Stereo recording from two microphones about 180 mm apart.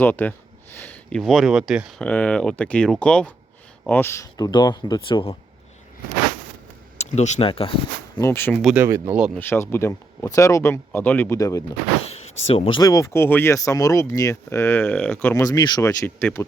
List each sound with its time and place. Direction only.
0.0 s speech: 10° left (ahead or behind)
2.0 s speech: 5° left (ahead or behind); by 5.4 s 30° left (ahead or behind)
7.0 s speech: 40° left (ahead or behind)
8.3 s speech: 10° left (ahead or behind)
8.6 s speech: 10° right (ahead or behind)
9.3 s speech: 10° left (ahead or behind)
12.5 s speech: 30° left (ahead or behind); by 15.4 s 10° left (ahead or behind)
15.4 s speech: 20° left (ahead or behind)